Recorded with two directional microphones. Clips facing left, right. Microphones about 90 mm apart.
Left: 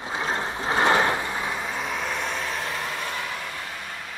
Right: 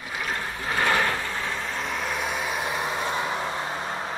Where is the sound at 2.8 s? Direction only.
20° right (ahead or behind).